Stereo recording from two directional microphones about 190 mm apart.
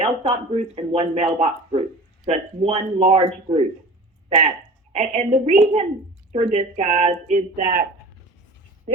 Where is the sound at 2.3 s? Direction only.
35° right (ahead or behind).